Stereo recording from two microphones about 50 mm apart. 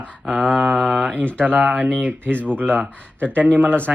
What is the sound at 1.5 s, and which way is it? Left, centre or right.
Speech, right.